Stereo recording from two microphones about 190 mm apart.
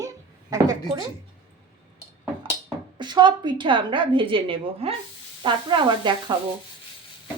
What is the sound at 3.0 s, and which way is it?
A woman's voice, 25° right (ahead or behind).